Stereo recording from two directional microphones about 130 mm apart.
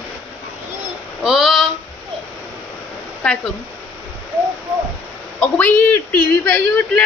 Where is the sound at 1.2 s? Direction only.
5° right (ahead or behind).